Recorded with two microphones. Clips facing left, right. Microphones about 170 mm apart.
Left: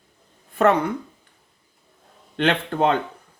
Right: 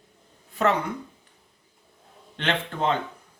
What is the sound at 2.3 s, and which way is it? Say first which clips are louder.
Speech: left 7 dB; 60° left (ahead or behind).